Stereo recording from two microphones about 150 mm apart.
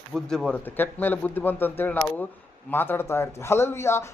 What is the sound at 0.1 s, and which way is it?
A man's voice, 5° left (ahead or behind).